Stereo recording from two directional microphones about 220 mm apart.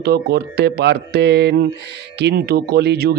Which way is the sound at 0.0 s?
45° right (ahead or behind).